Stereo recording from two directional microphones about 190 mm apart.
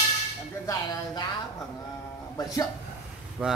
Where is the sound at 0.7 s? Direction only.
20° left (ahead or behind).